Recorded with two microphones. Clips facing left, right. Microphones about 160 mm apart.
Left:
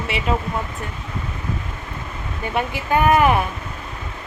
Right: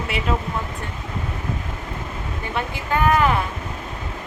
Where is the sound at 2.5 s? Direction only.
15° left (ahead or behind).